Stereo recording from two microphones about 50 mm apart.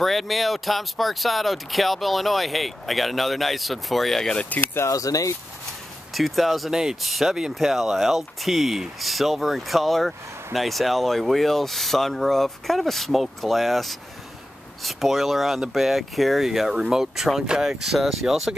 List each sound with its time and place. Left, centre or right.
0.0 s speech: centre
4.7 s speech: left
6.1 s speech: centre
6.7 s speech: centre
7.0 s speech: centre